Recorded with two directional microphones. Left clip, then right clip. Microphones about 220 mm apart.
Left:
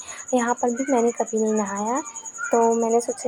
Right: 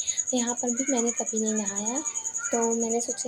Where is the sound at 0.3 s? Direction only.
5° left (ahead or behind).